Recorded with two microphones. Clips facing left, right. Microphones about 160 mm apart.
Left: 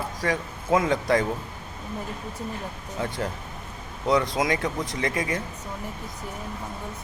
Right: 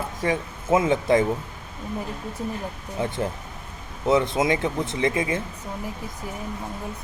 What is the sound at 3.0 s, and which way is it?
A man's voice, 20° right (ahead or behind).